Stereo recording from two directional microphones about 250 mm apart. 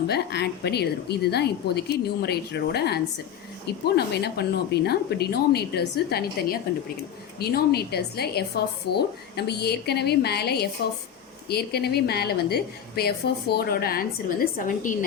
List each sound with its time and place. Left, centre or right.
0.1 s a woman's voice: left